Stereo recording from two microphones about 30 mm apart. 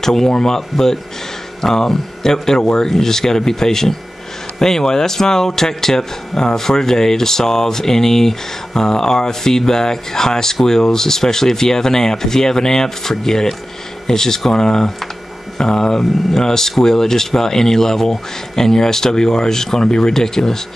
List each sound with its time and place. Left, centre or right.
0.0 s speech: centre
16.0 s speech: centre